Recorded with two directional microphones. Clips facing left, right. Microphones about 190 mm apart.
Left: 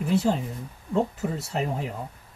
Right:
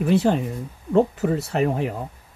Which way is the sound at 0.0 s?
65° right (ahead or behind).